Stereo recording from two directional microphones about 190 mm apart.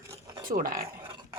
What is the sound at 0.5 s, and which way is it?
Speech, 50° right (ahead or behind).